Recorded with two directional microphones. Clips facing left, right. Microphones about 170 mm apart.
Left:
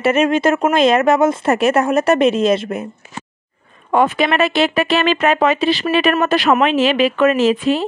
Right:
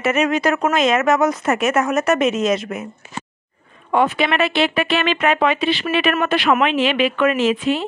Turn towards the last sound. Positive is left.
turn(degrees=40)  # may be behind; listen again after turning